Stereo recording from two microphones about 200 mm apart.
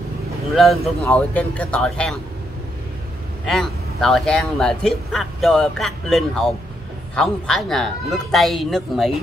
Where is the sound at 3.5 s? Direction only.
Centre (ahead or behind).